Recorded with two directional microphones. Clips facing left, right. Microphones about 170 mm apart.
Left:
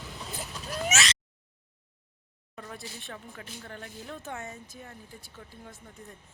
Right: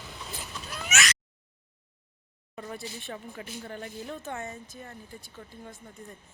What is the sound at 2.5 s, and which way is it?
Speech, 5° right (ahead or behind).